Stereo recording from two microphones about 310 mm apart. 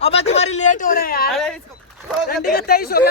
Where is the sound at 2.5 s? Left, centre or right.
Left.